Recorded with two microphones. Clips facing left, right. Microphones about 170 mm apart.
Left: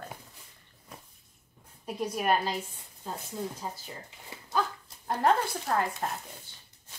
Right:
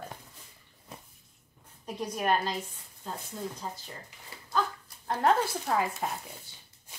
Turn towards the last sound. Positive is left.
turn(degrees=0)  # may be behind; listen again after turning